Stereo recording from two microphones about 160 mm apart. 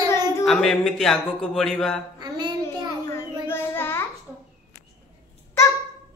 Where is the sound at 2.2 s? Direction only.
25° right (ahead or behind).